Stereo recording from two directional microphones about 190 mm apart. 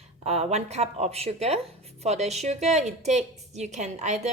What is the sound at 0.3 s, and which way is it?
A woman's voice, 35° right (ahead or behind).